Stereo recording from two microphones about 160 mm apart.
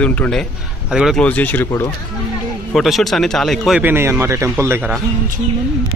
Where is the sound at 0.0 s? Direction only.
5° left (ahead or behind).